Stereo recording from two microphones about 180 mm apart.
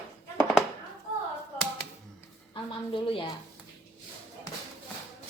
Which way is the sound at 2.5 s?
30° left (ahead or behind).